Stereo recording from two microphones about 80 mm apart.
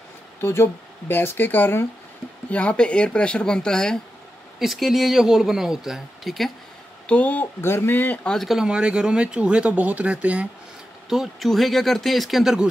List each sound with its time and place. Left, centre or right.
0.4 s speech: left
2.5 s speech: centre
4.6 s speech: centre
7.1 s speech: centre
7.6 s speech: left
8.2 s speech: centre
8.5 s speech: centre
11.1 s speech: centre